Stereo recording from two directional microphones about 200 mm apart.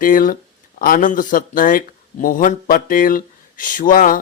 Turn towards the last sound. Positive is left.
turn(degrees=45)  # may be behind; listen again after turning